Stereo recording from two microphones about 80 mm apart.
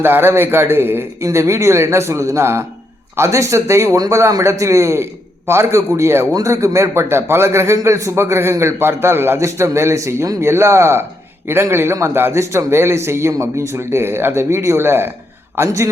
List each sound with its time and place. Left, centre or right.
0.0 s a man's voice: right